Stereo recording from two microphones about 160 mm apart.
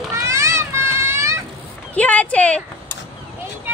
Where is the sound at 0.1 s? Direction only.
20° right (ahead or behind).